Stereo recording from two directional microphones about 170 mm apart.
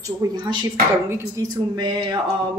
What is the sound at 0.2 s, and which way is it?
Speech, 20° right (ahead or behind).